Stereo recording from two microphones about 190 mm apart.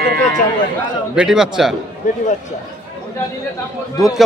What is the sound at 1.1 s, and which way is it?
Speech, 5° right (ahead or behind).